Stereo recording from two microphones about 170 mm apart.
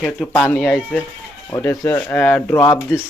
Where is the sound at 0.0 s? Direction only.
Centre (ahead or behind).